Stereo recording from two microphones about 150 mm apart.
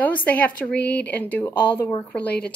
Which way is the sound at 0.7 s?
90° left.